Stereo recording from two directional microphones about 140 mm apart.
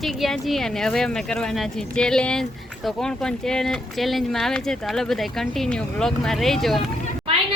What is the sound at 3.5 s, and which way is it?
Speech, 5° left (ahead or behind).